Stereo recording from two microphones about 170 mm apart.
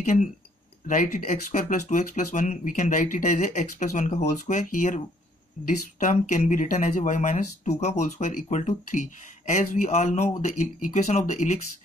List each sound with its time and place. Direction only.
0.0 s speech: 45° left (ahead or behind)